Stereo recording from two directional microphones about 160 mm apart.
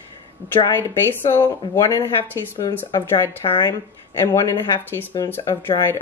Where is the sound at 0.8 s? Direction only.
15° left (ahead or behind).